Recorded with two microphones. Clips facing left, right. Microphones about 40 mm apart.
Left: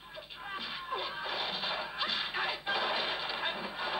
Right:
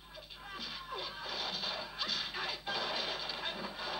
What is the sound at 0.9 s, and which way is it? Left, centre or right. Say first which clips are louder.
Music: left 6 dB; left.